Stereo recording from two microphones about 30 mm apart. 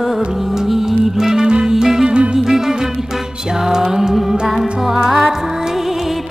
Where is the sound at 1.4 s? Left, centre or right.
Right.